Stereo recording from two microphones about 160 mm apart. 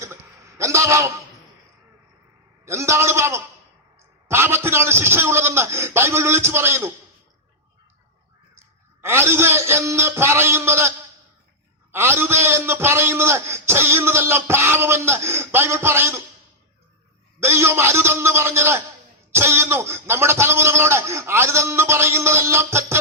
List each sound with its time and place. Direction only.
0.0 s a sound: 15° right (ahead or behind)
2.6 s a man's voice: 15° right (ahead or behind)
9.0 s a man's voice: 15° right (ahead or behind)
17.4 s a man's voice: 15° right (ahead or behind)